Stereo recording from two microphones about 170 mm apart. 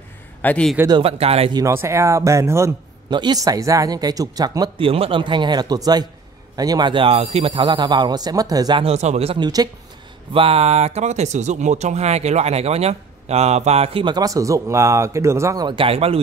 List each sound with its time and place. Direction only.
0.4 s a man's voice: 5° left (ahead or behind)
0.8 s speech: 30° right (ahead or behind)
1.5 s a man's voice: 15° right (ahead or behind); by 16.2 s 35° right (ahead or behind)